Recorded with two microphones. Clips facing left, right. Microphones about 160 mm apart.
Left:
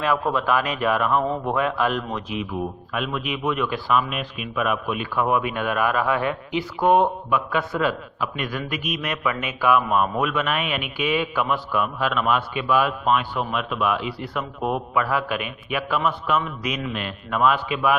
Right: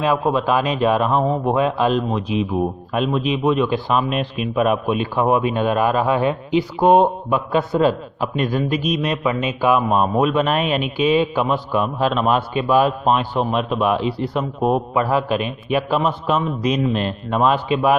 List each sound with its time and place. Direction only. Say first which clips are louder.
0.0 s a man's voice: right 4 dB; 20° right (ahead or behind)